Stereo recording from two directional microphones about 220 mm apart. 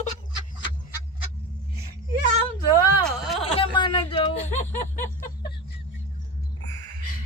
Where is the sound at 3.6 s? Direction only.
20° left (ahead or behind).